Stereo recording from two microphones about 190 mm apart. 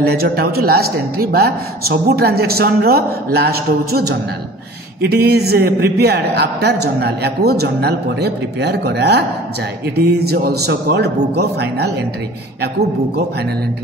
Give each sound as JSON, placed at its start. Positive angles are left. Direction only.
{"t": 0.0, "sound": "speech", "side_deg": -55}